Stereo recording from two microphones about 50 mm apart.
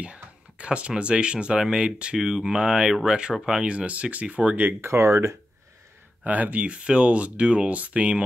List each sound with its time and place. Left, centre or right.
0.0 s speech: right
4.8 s speech: right
6.2 s speech: right